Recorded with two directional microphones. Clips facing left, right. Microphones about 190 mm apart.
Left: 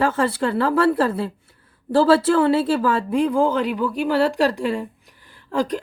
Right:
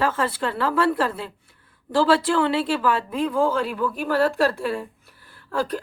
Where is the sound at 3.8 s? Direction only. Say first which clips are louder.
Left 1 dB; 15° left (ahead or behind).